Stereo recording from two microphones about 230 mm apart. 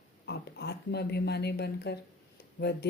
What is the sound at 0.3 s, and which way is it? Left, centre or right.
Speech, left.